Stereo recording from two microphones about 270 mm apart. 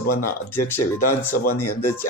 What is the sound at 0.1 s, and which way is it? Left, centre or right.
Speech, left.